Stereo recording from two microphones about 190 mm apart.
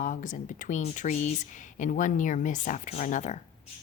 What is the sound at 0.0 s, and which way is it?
Speech, 45° left (ahead or behind).